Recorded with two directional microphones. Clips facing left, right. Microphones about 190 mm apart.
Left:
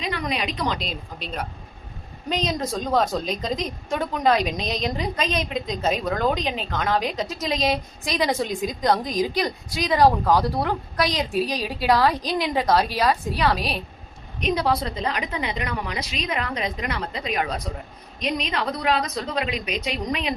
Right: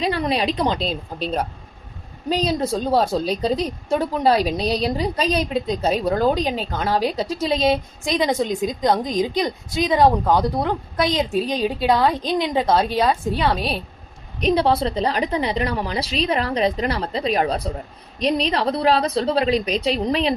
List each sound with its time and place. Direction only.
0.0 s a woman's voice: 35° right (ahead or behind)